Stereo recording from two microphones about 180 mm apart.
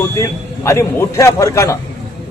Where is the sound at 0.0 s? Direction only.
15° left (ahead or behind).